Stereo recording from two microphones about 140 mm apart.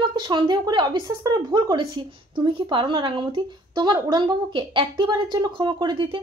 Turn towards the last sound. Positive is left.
turn(degrees=-35)  # may be behind; listen again after turning